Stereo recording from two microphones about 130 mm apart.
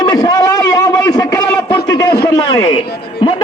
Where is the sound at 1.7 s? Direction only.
35° left (ahead or behind).